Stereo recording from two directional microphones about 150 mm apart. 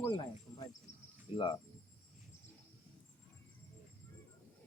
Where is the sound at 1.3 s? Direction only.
35° left (ahead or behind).